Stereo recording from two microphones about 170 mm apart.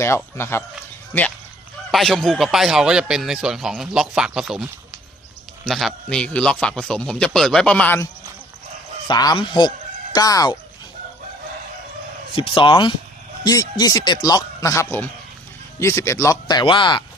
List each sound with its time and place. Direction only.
0.0 s speech: 15° left (ahead or behind)
1.9 s a man's voice: centre (ahead or behind)
9.0 s speech: 25° left (ahead or behind)
12.3 s speech: 30° left (ahead or behind)